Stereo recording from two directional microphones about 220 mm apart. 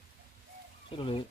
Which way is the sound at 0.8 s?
25° left (ahead or behind).